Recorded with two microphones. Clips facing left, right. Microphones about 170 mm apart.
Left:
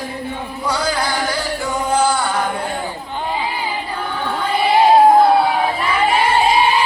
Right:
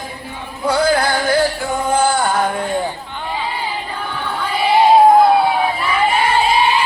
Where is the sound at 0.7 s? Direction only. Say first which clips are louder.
Right 6 dB; 55° right (ahead or behind).